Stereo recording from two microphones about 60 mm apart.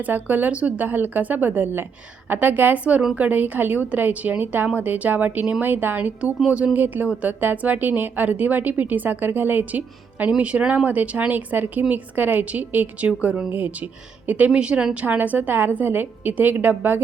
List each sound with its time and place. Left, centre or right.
0.0 s a woman's voice: right
13.1 s a woman's voice: centre
13.5 s a woman's voice: right